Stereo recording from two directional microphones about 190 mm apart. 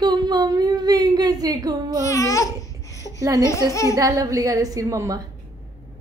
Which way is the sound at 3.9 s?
20° right (ahead or behind).